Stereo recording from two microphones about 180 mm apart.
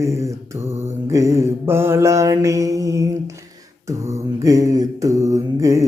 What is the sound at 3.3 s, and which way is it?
Mantra, 15° right (ahead or behind).